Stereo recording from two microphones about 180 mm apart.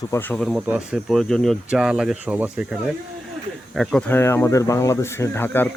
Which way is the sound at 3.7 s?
5° left (ahead or behind).